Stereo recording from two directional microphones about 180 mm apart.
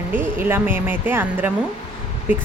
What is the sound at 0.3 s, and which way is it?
Speech, 10° right (ahead or behind).